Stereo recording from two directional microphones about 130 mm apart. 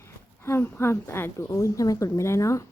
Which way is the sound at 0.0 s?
15° left (ahead or behind).